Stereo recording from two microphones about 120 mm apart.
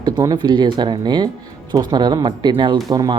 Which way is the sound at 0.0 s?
35° right (ahead or behind).